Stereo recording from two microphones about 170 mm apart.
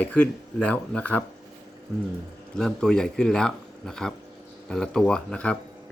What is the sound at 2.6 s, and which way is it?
Speech, 5° left (ahead or behind).